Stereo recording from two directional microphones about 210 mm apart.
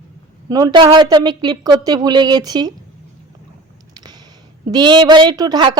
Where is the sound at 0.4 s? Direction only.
20° right (ahead or behind).